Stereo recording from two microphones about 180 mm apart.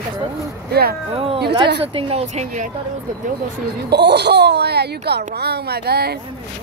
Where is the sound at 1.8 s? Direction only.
35° right (ahead or behind).